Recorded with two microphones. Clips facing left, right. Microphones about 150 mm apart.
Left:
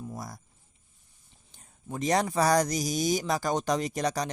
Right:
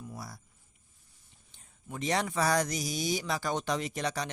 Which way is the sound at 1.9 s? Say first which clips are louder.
Left 5 dB; 40° left (ahead or behind).